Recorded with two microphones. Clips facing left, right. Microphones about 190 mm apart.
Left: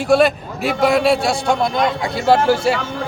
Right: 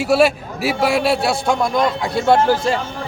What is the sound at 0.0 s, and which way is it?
A man's voice, 5° right (ahead or behind).